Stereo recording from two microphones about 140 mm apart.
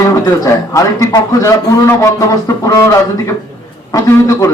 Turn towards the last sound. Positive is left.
turn(degrees=25)  # may be behind; listen again after turning